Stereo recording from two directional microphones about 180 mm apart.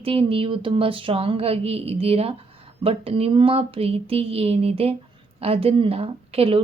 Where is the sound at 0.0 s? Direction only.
30° right (ahead or behind).